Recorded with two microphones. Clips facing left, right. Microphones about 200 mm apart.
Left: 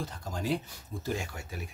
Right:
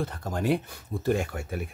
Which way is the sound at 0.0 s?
60° right (ahead or behind).